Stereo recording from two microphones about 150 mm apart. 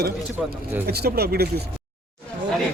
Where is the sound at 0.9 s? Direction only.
90° right.